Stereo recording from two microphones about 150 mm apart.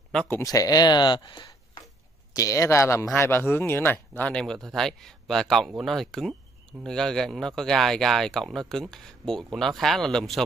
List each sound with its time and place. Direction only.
0.1 s speech: 5° left (ahead or behind)
0.4 s speech: 20° left (ahead or behind); by 10.4 s centre (ahead or behind)